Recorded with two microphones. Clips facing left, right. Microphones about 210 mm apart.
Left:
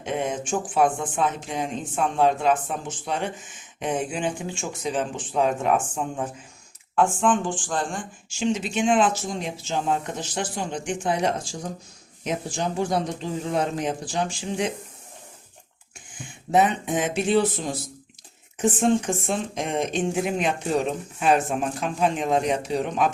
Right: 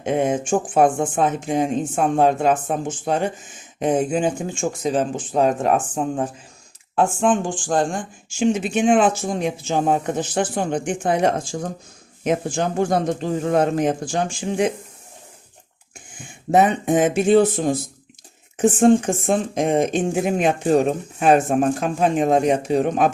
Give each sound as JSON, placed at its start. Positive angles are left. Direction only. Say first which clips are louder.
{"t": 0.0, "sound": "speech", "louder": "right 7 dB", "side_deg": -50}
{"t": 16.5, "sound": "speech", "louder": "right 5 dB", "side_deg": -50}